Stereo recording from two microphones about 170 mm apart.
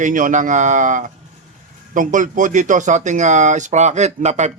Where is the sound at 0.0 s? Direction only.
50° right (ahead or behind).